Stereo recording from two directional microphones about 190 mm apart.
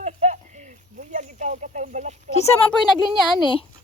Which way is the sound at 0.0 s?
35° right (ahead or behind).